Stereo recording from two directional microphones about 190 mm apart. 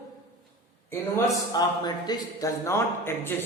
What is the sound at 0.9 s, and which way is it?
A man's voice, 15° left (ahead or behind).